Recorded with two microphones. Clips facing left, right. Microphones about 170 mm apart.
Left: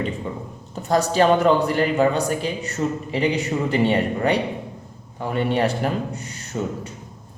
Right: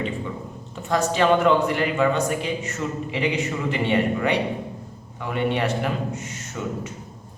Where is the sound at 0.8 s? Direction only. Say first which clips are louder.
Left 3 dB; 40° left (ahead or behind).